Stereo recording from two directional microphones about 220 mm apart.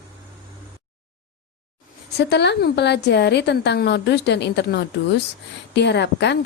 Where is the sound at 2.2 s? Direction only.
50° left (ahead or behind).